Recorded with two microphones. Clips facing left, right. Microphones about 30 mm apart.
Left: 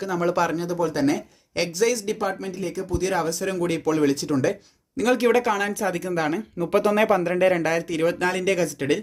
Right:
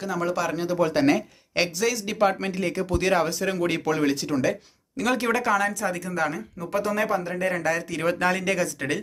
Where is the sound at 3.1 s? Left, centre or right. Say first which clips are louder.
Right 1 dB; centre.